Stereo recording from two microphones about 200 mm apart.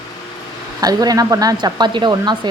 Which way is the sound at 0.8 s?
20° right (ahead or behind).